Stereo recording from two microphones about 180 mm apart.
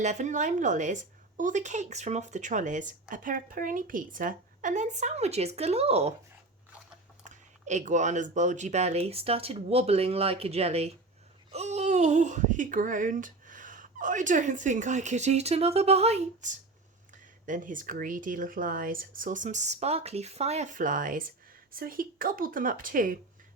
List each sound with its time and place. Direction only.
0.0 s a woman's voice: 40° right (ahead or behind)
7.3 s a woman's voice: 40° right (ahead or behind)